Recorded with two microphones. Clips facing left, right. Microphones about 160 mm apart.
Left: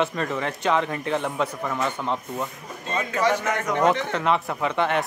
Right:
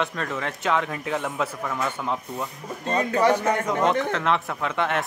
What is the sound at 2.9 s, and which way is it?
Speech, 40° right (ahead or behind).